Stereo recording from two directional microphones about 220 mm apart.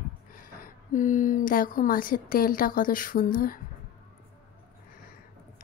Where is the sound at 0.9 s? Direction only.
35° left (ahead or behind).